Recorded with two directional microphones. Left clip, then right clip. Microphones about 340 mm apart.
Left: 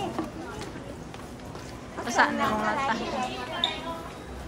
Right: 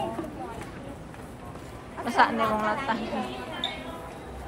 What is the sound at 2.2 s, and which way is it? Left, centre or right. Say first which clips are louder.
Speech: right 1 dB; centre.